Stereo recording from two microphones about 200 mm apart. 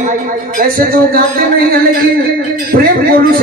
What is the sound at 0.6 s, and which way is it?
Speech, 45° right (ahead or behind).